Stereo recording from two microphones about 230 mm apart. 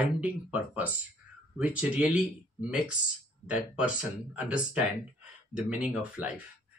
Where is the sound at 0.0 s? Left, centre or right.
Centre.